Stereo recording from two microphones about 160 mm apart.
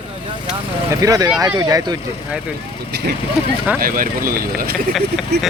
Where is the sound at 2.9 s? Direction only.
90° right.